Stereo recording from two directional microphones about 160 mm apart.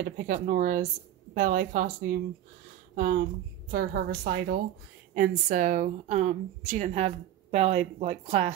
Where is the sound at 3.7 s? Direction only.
80° right.